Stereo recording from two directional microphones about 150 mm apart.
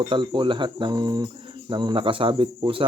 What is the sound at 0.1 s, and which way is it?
Speech, 35° right (ahead or behind).